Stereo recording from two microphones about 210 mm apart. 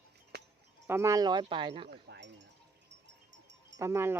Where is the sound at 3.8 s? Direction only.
10° right (ahead or behind).